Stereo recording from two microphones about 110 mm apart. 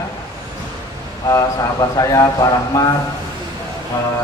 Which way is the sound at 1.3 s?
30° left (ahead or behind).